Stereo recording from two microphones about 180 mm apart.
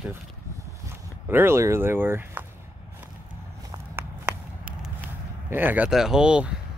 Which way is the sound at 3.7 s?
10° right (ahead or behind).